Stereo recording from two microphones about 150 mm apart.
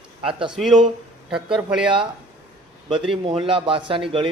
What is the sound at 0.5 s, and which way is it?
A man's voice, centre (ahead or behind).